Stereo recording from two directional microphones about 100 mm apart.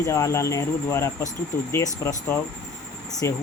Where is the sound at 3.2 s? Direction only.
30° left (ahead or behind).